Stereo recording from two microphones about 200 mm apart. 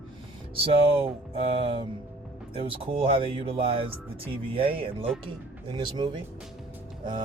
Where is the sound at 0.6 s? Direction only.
30° right (ahead or behind).